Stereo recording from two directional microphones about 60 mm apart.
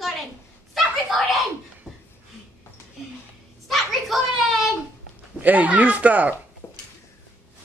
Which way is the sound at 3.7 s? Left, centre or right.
Centre.